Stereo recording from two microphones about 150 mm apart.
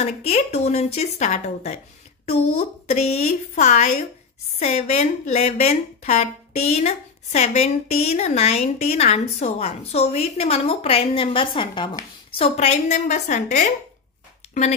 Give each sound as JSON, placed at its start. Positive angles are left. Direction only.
{"t": 0.0, "sound": "speech", "side_deg": 45}
{"t": 2.9, "sound": "speech", "side_deg": 45}
{"t": 12.5, "sound": "speech", "side_deg": 50}